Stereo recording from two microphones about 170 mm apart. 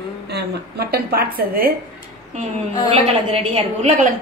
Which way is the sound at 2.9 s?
35° right (ahead or behind).